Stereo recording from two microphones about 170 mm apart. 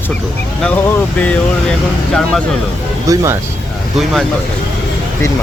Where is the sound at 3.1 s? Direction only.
20° right (ahead or behind).